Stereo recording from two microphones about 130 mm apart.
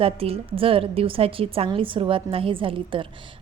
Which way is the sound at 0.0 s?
45° right (ahead or behind).